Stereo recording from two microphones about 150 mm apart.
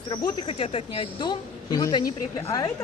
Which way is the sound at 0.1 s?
35° left (ahead or behind).